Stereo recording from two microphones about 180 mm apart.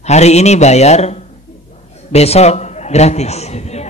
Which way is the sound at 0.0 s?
40° left (ahead or behind).